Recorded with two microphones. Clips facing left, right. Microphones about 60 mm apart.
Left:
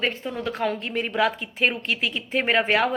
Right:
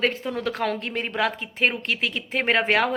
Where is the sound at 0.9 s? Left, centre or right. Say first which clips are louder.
Left 2 dB; right.